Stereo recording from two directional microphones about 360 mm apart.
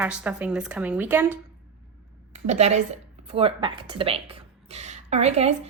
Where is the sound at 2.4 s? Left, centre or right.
Centre.